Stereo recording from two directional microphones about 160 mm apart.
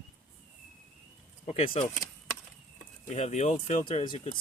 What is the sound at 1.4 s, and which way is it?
Speech, 40° left (ahead or behind).